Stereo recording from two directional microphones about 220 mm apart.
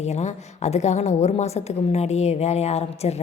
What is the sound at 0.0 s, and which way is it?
A woman's voice, 30° left (ahead or behind).